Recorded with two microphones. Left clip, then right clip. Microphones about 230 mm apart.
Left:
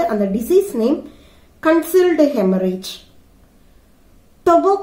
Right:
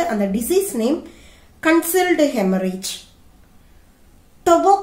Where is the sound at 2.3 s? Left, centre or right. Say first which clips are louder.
Left 3 dB; centre.